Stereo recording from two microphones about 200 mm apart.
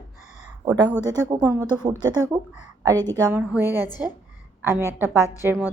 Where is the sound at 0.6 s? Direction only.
20° right (ahead or behind).